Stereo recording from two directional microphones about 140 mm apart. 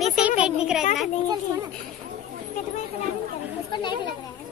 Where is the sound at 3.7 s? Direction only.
35° left (ahead or behind).